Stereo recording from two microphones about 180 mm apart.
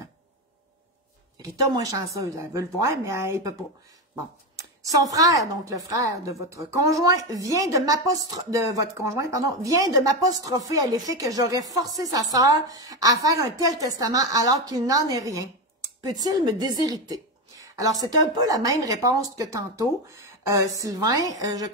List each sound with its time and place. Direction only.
1.4 s a woman's voice: 20° right (ahead or behind)
4.9 s a woman's voice: 20° right (ahead or behind)